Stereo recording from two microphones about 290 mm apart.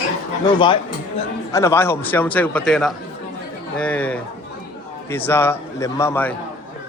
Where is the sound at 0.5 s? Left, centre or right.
Centre.